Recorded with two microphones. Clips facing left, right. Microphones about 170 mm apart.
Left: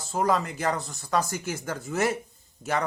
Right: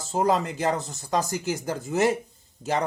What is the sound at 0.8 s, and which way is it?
Speech, 40° right (ahead or behind).